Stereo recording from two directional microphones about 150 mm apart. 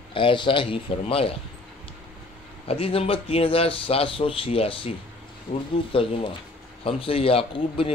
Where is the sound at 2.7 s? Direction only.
40° left (ahead or behind).